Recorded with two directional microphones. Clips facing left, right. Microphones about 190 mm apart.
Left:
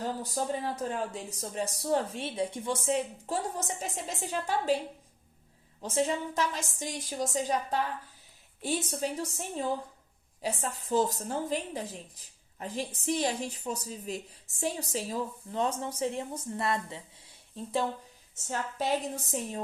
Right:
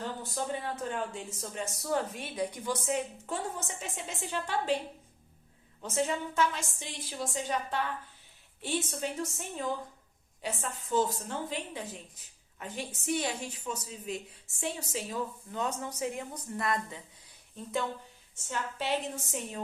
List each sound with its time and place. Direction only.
0.0 s speech: 40° left (ahead or behind)
6.1 s a woman's voice: 35° left (ahead or behind)
18.3 s speech: 40° left (ahead or behind)